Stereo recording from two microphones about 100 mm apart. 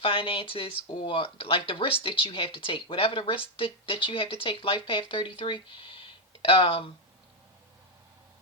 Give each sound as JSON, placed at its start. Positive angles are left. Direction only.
{"t": 0.0, "sound": "speech", "side_deg": 65}